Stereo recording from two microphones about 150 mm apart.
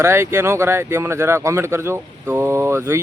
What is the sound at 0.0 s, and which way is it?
Speech, 15° right (ahead or behind).